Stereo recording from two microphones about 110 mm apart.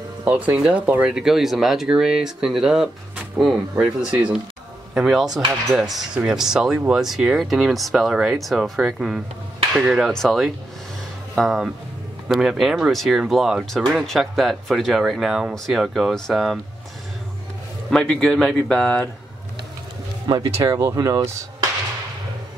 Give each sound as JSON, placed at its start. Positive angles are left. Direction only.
{"t": 0.2, "sound": "speech", "side_deg": -10}
{"t": 17.8, "sound": "speech", "side_deg": 5}
{"t": 20.5, "sound": "speech", "side_deg": -25}